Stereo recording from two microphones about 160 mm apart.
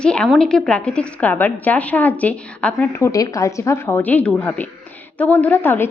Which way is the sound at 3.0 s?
20° left (ahead or behind).